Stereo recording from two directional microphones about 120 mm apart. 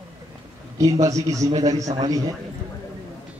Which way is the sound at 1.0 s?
30° right (ahead or behind).